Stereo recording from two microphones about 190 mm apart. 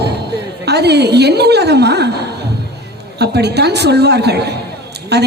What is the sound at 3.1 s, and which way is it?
A woman's voice, 60° right (ahead or behind).